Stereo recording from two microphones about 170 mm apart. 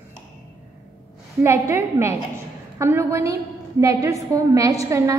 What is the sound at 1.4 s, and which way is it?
A woman's voice, 15° right (ahead or behind).